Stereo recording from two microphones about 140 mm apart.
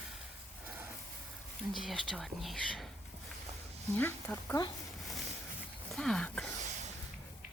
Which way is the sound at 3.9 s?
15° left (ahead or behind).